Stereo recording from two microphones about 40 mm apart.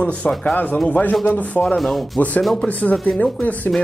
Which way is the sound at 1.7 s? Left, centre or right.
Centre.